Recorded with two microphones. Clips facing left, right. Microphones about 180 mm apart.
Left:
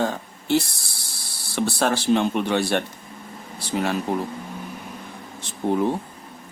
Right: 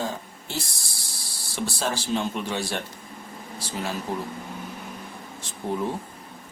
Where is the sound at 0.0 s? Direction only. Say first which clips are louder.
Left 6 dB; 65° left (ahead or behind).